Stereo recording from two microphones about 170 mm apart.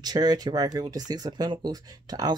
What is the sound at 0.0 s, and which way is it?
Speech, 25° right (ahead or behind).